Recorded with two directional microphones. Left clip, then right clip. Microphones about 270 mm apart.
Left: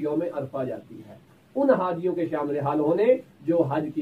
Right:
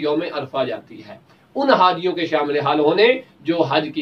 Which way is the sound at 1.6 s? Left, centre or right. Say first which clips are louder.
Right 8 dB; centre.